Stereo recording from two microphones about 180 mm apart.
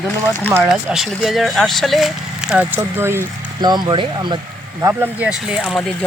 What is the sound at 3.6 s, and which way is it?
Speech, 25° right (ahead or behind).